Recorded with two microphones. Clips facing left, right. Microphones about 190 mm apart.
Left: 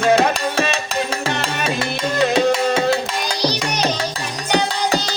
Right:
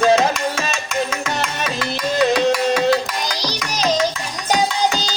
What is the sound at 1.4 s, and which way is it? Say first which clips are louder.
Music: left 2 dB; 30° left (ahead or behind).